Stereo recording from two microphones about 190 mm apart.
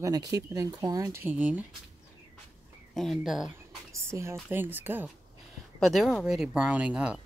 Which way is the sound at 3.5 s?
15° right (ahead or behind).